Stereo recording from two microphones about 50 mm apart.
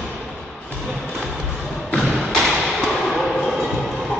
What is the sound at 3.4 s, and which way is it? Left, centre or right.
Train, centre.